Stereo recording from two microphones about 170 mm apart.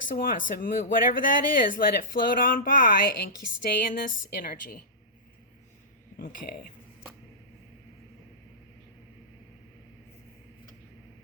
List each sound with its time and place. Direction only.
0.2 s speech: 55° left (ahead or behind)
6.1 s speech: 55° left (ahead or behind)